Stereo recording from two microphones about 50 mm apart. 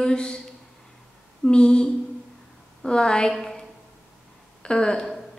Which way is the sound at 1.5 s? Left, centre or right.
Centre.